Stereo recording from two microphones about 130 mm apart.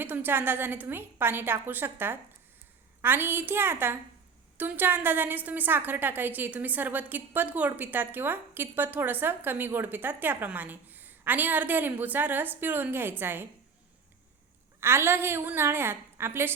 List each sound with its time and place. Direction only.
0.0 s a woman's voice: 15° right (ahead or behind)
14.8 s a woman's voice: 20° right (ahead or behind)